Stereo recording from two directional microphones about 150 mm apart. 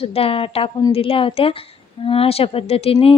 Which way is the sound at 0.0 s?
40° left (ahead or behind).